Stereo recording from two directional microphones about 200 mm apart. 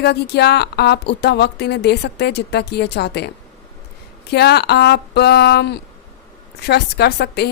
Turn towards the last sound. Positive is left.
turn(degrees=55)  # may be behind; listen again after turning